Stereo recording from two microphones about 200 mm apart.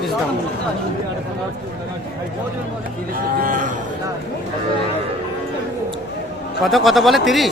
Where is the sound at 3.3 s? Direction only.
45° right (ahead or behind).